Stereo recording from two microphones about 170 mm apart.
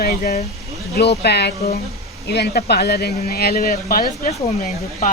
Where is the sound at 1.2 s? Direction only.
75° left (ahead or behind).